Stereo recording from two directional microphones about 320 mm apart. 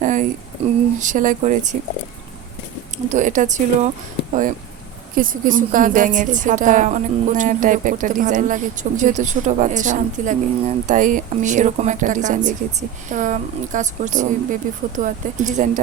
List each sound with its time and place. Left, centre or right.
0.0 s a sound: right
0.6 s a woman's voice: centre
3.1 s a woman's voice: right
5.1 s a woman's voice: right